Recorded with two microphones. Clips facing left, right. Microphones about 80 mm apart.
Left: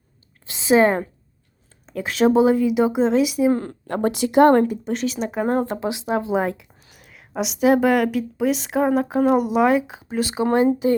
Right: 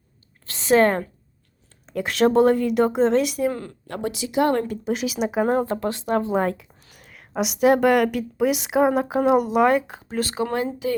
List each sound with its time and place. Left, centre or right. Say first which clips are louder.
0.4 s a sound: left 1 dB; centre
1.9 s a woman's voice: left 1 dB; centre
3.5 s speech: left 8 dB; left
4.1 s speech: left 7 dB; left
4.9 s a woman's voice: even; centre
10.4 s speech: left 9 dB; left